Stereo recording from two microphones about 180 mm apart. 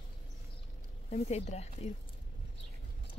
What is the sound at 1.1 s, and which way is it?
Speech, 35° left (ahead or behind).